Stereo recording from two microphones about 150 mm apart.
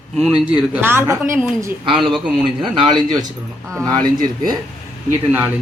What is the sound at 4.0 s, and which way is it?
Speech, 25° right (ahead or behind).